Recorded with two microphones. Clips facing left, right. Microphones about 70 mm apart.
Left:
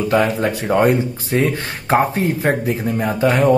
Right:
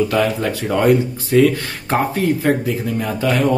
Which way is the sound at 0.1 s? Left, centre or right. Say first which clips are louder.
Left 1 dB; left.